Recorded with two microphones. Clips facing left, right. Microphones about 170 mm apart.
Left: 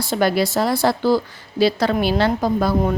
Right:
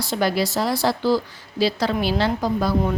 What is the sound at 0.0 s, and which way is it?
Speech, 55° left (ahead or behind).